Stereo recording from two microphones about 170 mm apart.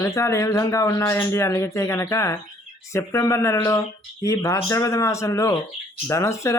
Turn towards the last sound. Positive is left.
turn(degrees=15)  # may be behind; listen again after turning